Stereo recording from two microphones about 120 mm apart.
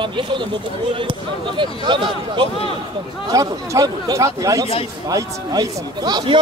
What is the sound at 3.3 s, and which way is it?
A man's voice, 30° right (ahead or behind).